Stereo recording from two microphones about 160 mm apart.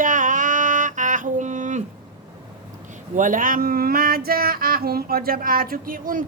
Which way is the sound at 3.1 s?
55° right (ahead or behind).